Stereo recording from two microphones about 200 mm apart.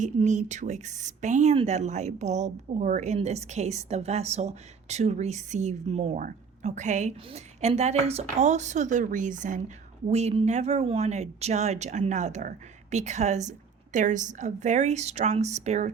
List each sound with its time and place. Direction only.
0.0 s a woman's voice: 35° right (ahead or behind)